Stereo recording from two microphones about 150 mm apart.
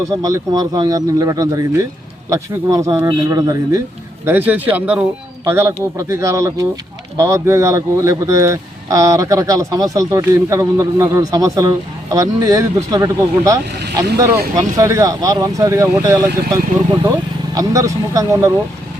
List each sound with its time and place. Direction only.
0.0 s speech: 20° right (ahead or behind)
17.5 s speech: 20° right (ahead or behind)